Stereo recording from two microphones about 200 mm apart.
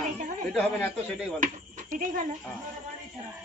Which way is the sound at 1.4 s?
40° right (ahead or behind).